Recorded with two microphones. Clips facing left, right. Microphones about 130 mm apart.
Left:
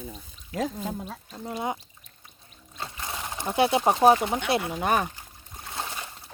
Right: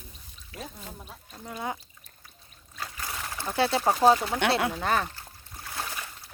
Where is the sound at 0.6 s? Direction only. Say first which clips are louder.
Left 12 dB; 90° left.